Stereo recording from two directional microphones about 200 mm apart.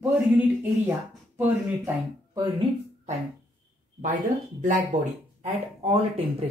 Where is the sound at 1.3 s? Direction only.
10° right (ahead or behind).